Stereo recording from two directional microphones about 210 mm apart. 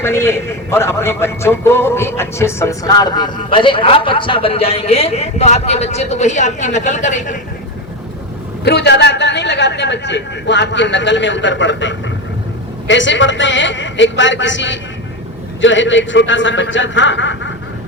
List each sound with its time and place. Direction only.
0.0 s speech: 10° left (ahead or behind); by 7.3 s 35° left (ahead or behind)
8.6 s speech: 55° left (ahead or behind)